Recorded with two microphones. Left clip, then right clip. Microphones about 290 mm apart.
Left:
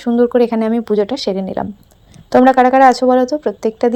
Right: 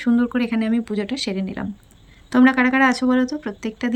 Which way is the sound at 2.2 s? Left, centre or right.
Centre.